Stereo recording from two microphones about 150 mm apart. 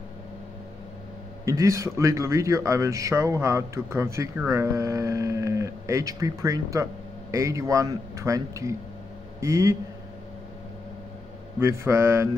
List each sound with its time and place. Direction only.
1.4 s speech: 20° right (ahead or behind)
11.6 s speech: 15° right (ahead or behind)